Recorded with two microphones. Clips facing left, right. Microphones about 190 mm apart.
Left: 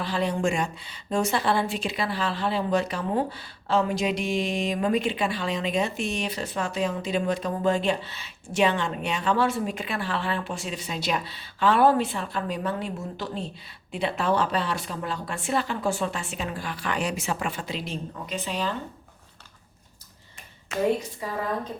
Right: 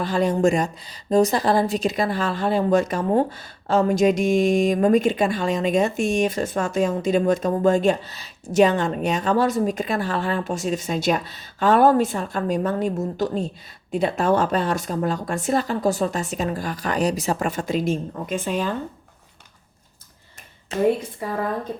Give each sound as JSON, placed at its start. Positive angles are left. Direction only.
{"t": 0.0, "sound": "speech", "side_deg": -45}
{"t": 20.7, "sound": "a woman's voice", "side_deg": -35}
{"t": 21.2, "sound": "a woman's voice", "side_deg": -55}